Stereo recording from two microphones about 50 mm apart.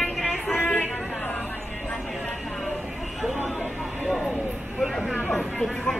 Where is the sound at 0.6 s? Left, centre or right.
Left.